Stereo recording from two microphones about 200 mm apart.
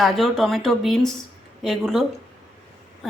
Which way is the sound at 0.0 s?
Centre (ahead or behind).